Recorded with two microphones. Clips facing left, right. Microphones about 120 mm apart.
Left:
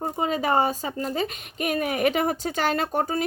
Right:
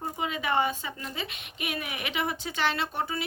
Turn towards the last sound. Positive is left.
turn(degrees=45)  # may be behind; listen again after turning